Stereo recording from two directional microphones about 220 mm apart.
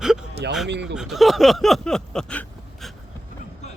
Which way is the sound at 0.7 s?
50° right (ahead or behind).